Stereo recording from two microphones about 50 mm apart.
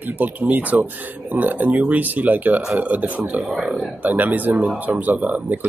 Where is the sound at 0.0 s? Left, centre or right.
Right.